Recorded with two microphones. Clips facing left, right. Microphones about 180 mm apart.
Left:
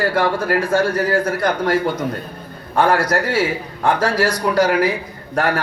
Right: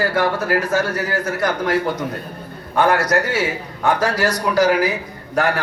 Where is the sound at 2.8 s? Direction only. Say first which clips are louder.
Even; 30° left (ahead or behind).